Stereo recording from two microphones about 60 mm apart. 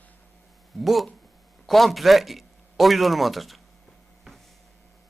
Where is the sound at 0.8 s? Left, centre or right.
Centre.